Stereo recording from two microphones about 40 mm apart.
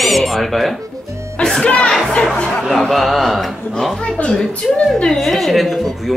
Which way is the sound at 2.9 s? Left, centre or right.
Centre.